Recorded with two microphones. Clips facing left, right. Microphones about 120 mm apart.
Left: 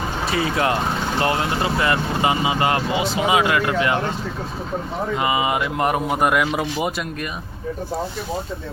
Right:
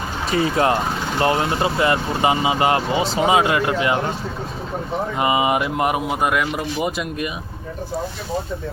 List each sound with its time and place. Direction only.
0.3 s speech: 30° right (ahead or behind)
5.1 s speech: 25° right (ahead or behind)
5.8 s speech: 10° right (ahead or behind)
6.2 s speech: centre (ahead or behind)